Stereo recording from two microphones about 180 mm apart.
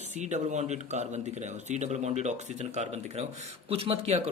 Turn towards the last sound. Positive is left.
turn(degrees=-35)  # may be behind; listen again after turning